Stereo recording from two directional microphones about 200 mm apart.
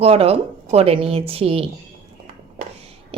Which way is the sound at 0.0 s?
30° right (ahead or behind).